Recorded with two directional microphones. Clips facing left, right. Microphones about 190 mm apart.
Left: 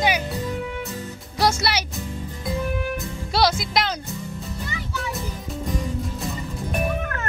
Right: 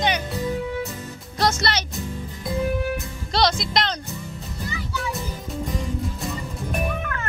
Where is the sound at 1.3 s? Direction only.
10° left (ahead or behind).